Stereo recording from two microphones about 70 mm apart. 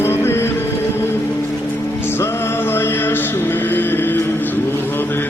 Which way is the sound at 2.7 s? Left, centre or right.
Left.